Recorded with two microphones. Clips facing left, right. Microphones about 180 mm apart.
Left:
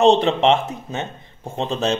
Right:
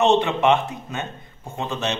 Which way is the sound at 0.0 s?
30° left (ahead or behind).